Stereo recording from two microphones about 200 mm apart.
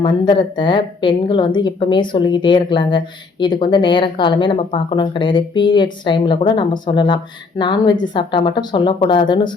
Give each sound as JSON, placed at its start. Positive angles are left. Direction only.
{"t": 0.0, "sound": "speech", "side_deg": 25}